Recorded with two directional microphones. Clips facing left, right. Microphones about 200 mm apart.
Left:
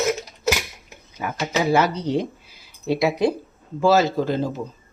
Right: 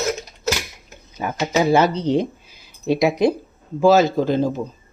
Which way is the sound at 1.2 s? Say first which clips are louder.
Right 4 dB; 25° right (ahead or behind).